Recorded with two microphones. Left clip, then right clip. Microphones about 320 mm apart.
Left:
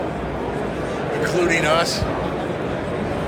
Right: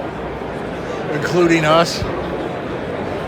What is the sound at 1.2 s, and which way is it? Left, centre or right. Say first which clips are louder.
Speech: right 4 dB; centre.